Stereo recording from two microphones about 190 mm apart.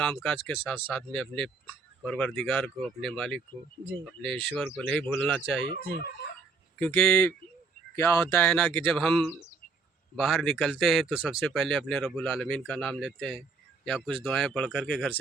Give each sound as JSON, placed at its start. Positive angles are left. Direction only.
{"t": 0.0, "sound": "speech", "side_deg": 5}
{"t": 5.6, "sound": "chicken", "side_deg": 55}
{"t": 6.7, "sound": "speech", "side_deg": 5}